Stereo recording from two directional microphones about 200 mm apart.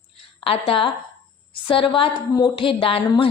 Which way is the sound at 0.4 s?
30° left (ahead or behind).